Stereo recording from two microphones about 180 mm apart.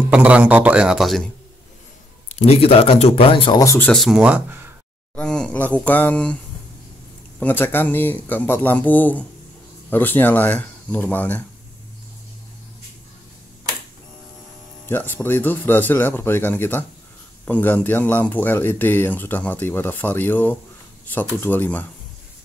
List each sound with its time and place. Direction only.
0.1 s speech: 5° right (ahead or behind)
2.2 s speech: 35° left (ahead or behind); by 3.9 s 15° left (ahead or behind)
3.9 s speech: centre (ahead or behind)
5.1 s speech: 5° left (ahead or behind)
7.3 s speech: 10° left (ahead or behind)
14.9 s speech: 10° left (ahead or behind)